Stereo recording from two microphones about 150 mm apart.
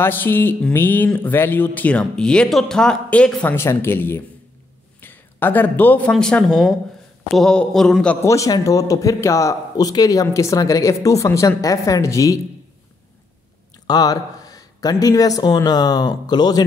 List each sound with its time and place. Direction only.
0.0 s speech: 15° left (ahead or behind)
8.3 s speech: 20° left (ahead or behind)
13.8 s speech: 25° left (ahead or behind)